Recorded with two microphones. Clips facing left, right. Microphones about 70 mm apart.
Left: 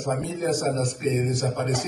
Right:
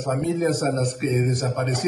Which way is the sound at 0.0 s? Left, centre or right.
Right.